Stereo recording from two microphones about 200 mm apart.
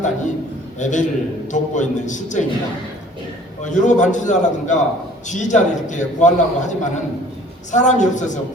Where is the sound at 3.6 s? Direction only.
40° left (ahead or behind).